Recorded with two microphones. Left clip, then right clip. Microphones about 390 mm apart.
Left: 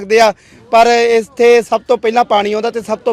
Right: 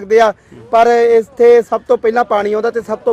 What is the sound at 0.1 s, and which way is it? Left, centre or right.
A man's voice, left.